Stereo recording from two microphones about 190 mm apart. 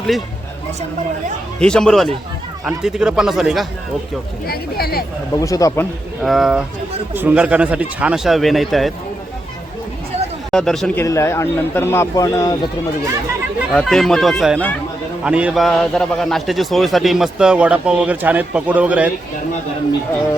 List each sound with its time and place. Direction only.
1.5 s a man's voice: 5° left (ahead or behind)
4.4 s speech: 55° left (ahead or behind)
5.4 s speech: 15° left (ahead or behind)
6.2 s a man's voice: centre (ahead or behind)
10.5 s a man's voice: 5° left (ahead or behind)
11.0 s speech: 15° left (ahead or behind)
13.7 s a man's voice: centre (ahead or behind)